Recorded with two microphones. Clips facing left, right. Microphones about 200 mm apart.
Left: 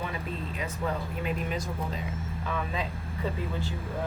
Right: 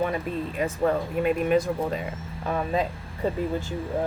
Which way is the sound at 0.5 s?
50° right (ahead or behind).